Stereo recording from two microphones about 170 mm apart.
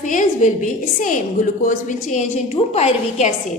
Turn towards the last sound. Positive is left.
turn(degrees=40)  # may be behind; listen again after turning